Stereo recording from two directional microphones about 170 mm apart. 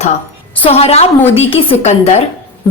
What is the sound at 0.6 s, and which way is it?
A woman's voice, 35° left (ahead or behind).